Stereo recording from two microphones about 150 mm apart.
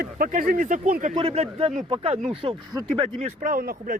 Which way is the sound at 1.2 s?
40° right (ahead or behind).